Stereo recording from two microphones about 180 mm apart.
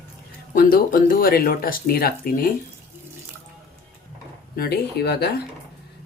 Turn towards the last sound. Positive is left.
turn(degrees=60)  # may be behind; listen again after turning